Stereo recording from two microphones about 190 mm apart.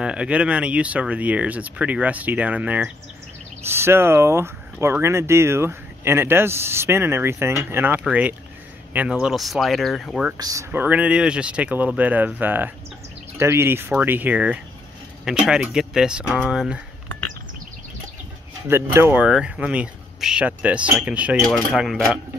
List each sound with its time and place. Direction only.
0.0 s speech: 5° right (ahead or behind)
10.3 s speech: 20° right (ahead or behind)
18.7 s speech: 15° right (ahead or behind)